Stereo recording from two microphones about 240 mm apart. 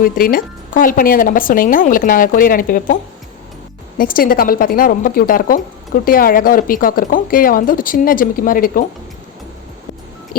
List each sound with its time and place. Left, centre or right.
0.0 s speech: left